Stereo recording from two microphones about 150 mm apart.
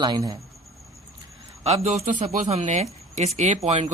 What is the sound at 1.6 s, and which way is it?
Speech, 45° right (ahead or behind).